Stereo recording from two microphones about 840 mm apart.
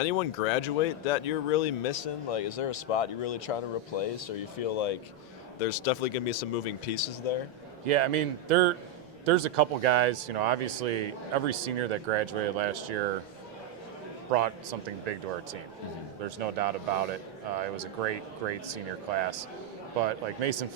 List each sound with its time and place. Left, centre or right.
0.0 s speech: left
5.6 s speech: left
7.9 s speech: right
14.3 s speech: right
16.4 s speech: right
20.0 s speech: right